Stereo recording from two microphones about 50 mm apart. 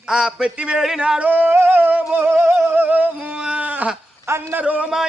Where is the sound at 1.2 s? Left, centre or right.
Right.